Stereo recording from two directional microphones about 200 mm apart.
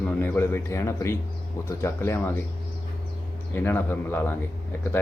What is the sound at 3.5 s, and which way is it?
Speech, 10° left (ahead or behind).